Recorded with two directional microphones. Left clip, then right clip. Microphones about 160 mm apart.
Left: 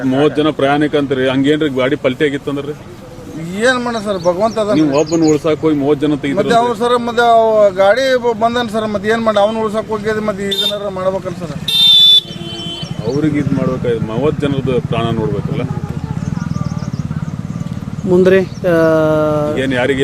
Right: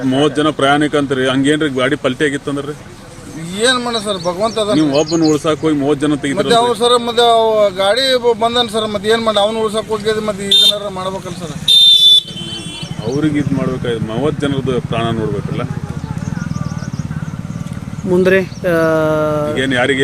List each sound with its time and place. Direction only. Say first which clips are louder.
0.1 s speech: left 1 dB; 50° right (ahead or behind)
3.6 s speech: even; centre (ahead or behind)
4.9 s speech: left 1 dB; 55° right (ahead or behind)
6.3 s speech: even; centre (ahead or behind)
13.2 s speech: right 1 dB; 50° right (ahead or behind)
18.1 s speech: left 2 dB; centre (ahead or behind)
19.5 s speech: right 1 dB; 45° right (ahead or behind)